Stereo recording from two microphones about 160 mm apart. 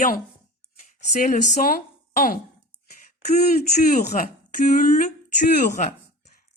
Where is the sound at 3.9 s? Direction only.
60° left (ahead or behind).